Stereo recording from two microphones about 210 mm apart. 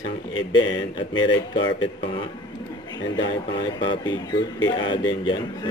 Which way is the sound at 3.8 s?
25° left (ahead or behind).